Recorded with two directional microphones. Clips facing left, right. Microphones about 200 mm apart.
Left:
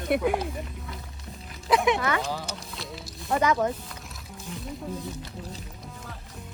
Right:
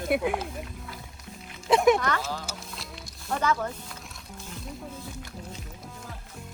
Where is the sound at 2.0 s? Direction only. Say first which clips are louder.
Left 2 dB; 5° left (ahead or behind).